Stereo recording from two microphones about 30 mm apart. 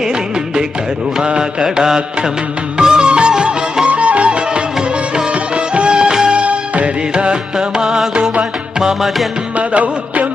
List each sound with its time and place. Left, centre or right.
1.2 s mantra: right
1.8 s music: centre
3.1 s music of bollywood: right
3.8 s music: right
6.3 s music: right
7.8 s music: centre
9.6 s music: right